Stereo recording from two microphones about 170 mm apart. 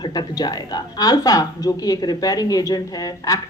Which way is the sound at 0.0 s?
25° left (ahead or behind).